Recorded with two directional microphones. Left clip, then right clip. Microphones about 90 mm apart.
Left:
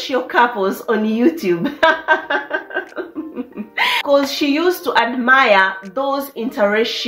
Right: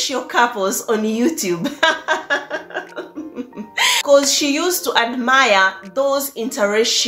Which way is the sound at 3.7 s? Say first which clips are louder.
Right 2 dB; 35° right (ahead or behind).